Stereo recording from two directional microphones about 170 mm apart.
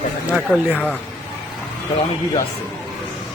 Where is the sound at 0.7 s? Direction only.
10° left (ahead or behind).